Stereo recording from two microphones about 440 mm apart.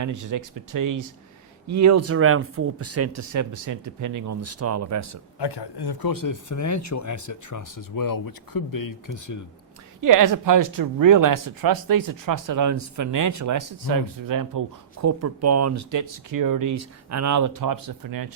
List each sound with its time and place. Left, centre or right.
0.0 s speech: right
5.4 s speech: left
10.0 s speech: right
15.0 s speech: right